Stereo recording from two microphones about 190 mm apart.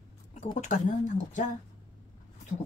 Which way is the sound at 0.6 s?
40° left (ahead or behind).